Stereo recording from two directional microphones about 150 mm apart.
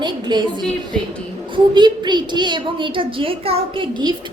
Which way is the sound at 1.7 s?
30° right (ahead or behind).